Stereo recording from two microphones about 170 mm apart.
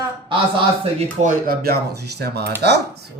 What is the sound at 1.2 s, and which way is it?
Speech, 60° right (ahead or behind).